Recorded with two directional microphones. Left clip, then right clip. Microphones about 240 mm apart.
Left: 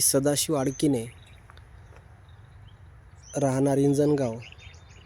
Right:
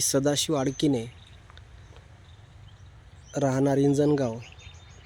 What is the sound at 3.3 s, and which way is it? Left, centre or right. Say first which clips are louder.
Speech: even; centre.